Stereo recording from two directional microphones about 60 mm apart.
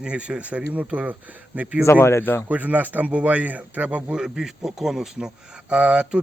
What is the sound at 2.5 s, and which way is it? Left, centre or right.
Speech, right.